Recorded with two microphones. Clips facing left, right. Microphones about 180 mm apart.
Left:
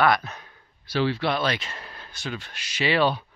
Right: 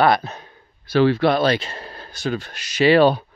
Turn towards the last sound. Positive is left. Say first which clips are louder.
# right 9 dB
turn(degrees=-45)  # may be behind; listen again after turning